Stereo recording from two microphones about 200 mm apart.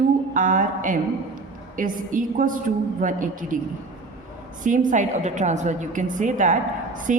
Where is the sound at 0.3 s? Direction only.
40° right (ahead or behind).